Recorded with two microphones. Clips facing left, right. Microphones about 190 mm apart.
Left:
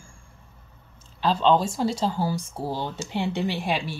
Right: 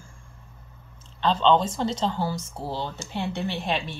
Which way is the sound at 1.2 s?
5° left (ahead or behind).